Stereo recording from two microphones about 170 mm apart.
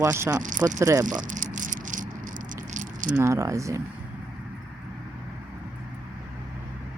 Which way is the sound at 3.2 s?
15° right (ahead or behind).